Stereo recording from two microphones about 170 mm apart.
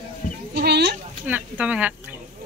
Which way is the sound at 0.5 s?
70° right (ahead or behind).